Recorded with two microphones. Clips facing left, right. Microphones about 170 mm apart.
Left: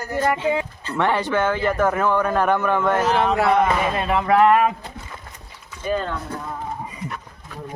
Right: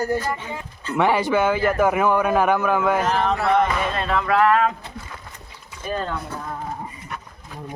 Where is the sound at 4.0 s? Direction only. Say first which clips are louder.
Left 2 dB; 15° left (ahead or behind).